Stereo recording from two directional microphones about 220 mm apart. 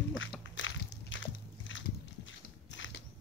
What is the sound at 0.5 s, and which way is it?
Biting, 60° left (ahead or behind).